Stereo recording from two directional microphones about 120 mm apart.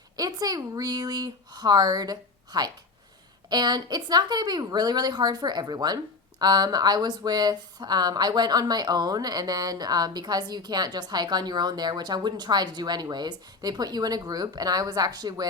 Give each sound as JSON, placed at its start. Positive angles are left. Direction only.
{"t": 0.2, "sound": "speech", "side_deg": -30}